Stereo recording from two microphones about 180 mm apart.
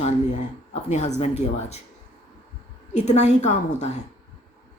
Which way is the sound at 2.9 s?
40° left (ahead or behind).